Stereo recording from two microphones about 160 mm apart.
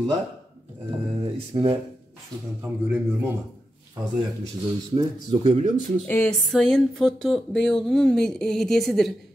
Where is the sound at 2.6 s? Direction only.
10° right (ahead or behind).